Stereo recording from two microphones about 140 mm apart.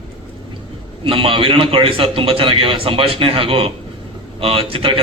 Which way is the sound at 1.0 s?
40° right (ahead or behind).